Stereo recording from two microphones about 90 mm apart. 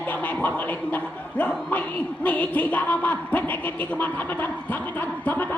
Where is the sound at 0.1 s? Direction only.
20° left (ahead or behind).